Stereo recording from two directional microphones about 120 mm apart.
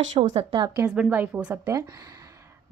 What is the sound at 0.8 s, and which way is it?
Speech, 5° right (ahead or behind).